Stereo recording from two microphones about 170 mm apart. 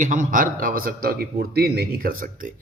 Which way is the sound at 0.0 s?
50° right (ahead or behind).